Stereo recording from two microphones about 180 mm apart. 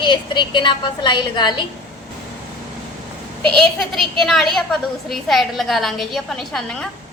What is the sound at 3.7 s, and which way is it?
A woman's voice, centre (ahead or behind).